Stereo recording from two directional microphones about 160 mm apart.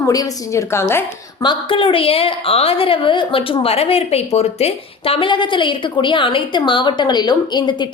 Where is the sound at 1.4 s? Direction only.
30° left (ahead or behind).